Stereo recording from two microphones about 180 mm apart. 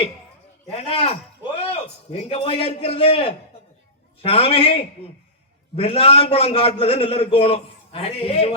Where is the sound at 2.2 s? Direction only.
35° left (ahead or behind).